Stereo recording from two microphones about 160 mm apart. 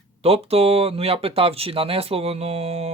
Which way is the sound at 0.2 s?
40° right (ahead or behind).